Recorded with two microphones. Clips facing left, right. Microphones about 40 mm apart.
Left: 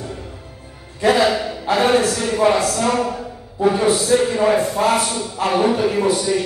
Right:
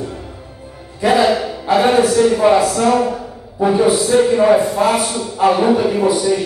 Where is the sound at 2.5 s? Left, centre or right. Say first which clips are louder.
Right 5 dB; right.